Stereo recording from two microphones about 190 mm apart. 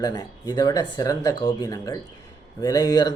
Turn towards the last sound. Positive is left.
turn(degrees=20)  # may be behind; listen again after turning